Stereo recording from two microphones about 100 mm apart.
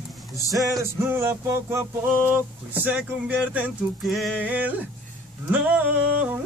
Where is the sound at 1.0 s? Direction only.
25° right (ahead or behind).